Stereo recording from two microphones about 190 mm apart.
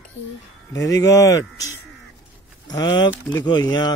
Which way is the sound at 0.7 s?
20° left (ahead or behind).